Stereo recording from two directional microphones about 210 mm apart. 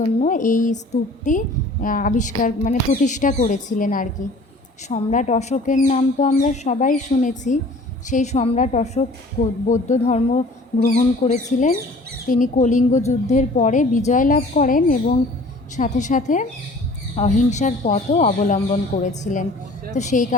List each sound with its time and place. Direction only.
0.0 s a woman's voice: 35° left (ahead or behind)